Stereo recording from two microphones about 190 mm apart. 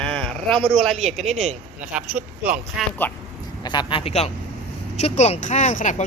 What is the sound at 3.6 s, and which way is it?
Speech, 25° left (ahead or behind).